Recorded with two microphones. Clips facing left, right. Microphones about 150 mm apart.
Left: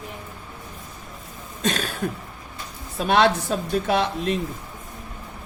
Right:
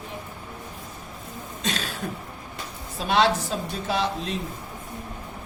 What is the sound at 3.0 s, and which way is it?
Speech, 55° left (ahead or behind).